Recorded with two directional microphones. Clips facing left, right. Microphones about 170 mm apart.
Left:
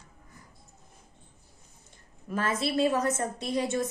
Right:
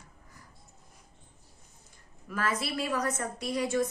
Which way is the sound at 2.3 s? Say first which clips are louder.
Left 4 dB; 25° left (ahead or behind).